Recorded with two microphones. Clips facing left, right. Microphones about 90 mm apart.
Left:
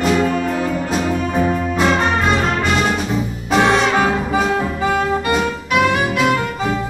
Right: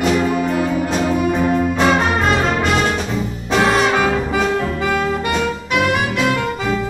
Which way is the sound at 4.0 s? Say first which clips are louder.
Even; 25° left (ahead or behind).